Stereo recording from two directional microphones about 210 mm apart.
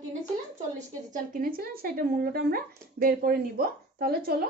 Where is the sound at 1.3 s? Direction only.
45° right (ahead or behind).